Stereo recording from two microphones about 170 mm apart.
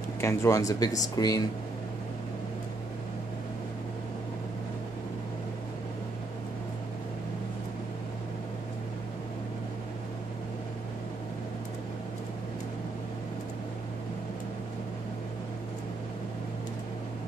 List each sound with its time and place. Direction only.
0.2 s speech: 15° left (ahead or behind)